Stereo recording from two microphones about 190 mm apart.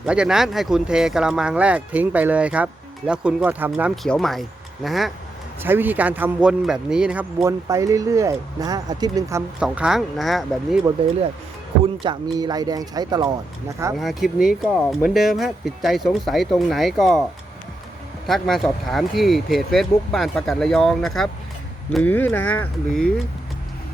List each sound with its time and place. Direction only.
0.0 s speech: 5° right (ahead or behind)
7.4 s speech: 15° right (ahead or behind)
9.6 s speech: 5° right (ahead or behind)
12.0 s speech: 20° right (ahead or behind)
13.9 s speech: centre (ahead or behind)
18.3 s speech: centre (ahead or behind)